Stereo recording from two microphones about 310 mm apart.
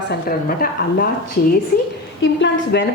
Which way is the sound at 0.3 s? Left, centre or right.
Left.